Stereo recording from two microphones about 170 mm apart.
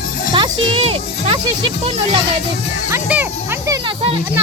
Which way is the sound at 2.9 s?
10° right (ahead or behind).